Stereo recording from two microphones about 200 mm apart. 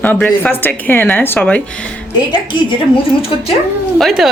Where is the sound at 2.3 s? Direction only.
25° left (ahead or behind).